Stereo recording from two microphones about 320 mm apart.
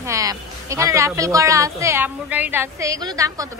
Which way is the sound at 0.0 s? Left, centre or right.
Centre.